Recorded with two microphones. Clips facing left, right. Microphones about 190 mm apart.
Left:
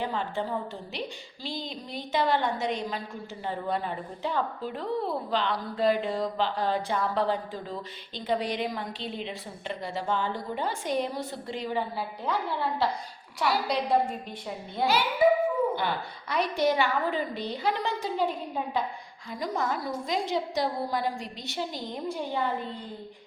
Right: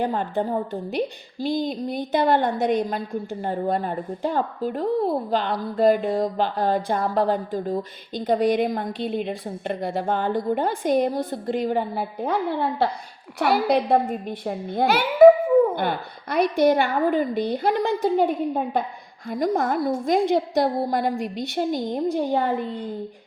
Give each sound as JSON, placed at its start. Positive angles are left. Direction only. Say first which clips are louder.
{"t": 0.0, "sound": "a woman's voice", "louder": "right 7 dB", "side_deg": -50}